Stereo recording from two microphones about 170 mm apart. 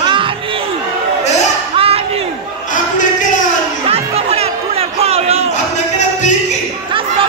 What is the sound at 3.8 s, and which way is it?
Music, 35° right (ahead or behind).